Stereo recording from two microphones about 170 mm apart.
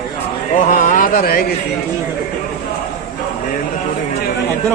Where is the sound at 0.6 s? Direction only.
50° left (ahead or behind).